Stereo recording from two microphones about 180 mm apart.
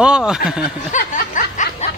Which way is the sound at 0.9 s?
45° left (ahead or behind).